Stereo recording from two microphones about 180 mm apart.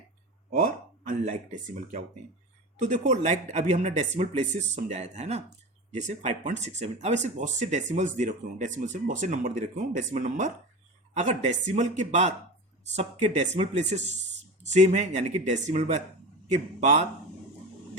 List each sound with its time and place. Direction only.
0.5 s speech: 45° right (ahead or behind)